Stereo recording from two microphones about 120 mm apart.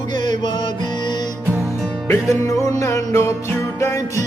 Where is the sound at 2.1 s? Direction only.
25° left (ahead or behind).